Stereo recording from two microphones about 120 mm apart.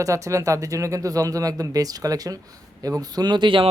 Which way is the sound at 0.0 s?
25° right (ahead or behind).